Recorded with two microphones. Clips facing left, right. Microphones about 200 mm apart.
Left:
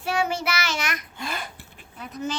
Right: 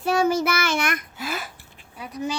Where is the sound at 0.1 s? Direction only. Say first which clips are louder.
Right 5 dB; 40° right (ahead or behind).